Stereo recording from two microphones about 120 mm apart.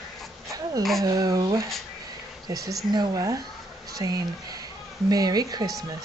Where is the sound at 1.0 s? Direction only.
30° right (ahead or behind).